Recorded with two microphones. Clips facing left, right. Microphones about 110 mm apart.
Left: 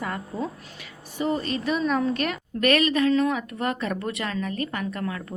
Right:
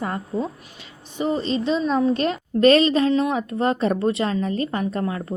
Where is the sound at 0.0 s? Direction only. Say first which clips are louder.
Right 4 dB; 30° right (ahead or behind).